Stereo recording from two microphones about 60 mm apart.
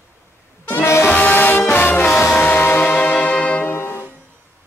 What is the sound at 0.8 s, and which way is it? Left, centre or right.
Music, left.